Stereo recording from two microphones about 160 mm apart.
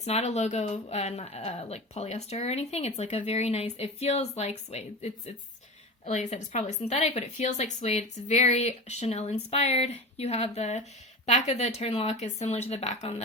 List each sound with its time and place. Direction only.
0.0 s speech: 45° left (ahead or behind)